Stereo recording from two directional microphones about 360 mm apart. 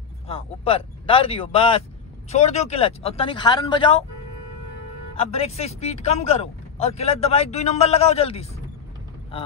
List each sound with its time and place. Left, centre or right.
0.3 s speech: centre
5.1 s speech: centre